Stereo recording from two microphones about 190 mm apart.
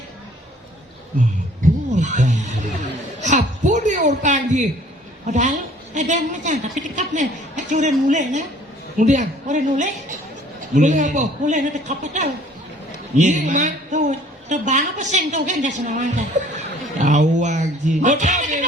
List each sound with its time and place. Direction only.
2.0 s a woman's voice: 40° right (ahead or behind)